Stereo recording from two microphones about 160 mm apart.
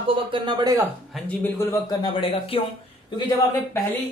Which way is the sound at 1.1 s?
10° left (ahead or behind).